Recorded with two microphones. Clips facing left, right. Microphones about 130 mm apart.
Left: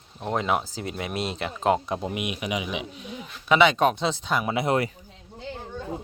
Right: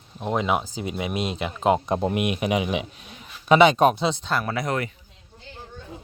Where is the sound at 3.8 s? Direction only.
10° right (ahead or behind).